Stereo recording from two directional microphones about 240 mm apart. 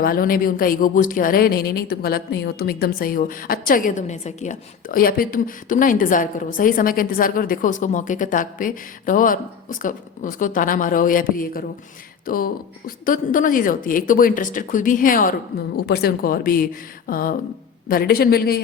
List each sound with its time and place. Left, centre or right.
0.0 s a woman's voice: left